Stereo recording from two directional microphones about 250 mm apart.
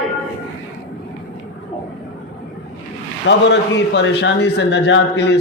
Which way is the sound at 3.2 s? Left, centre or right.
Left.